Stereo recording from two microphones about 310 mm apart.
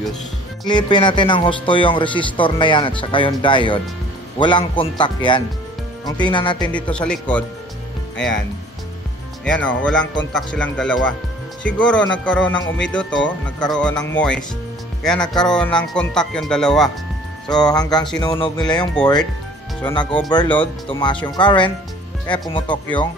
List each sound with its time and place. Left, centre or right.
0.7 s speech: centre
6.7 s speech: centre
9.4 s speech: centre
17.5 s speech: centre